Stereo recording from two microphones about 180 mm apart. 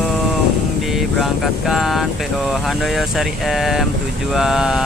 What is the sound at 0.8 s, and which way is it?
Speech, centre (ahead or behind).